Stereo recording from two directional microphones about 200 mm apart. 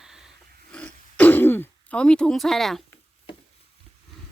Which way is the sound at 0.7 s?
5° left (ahead or behind).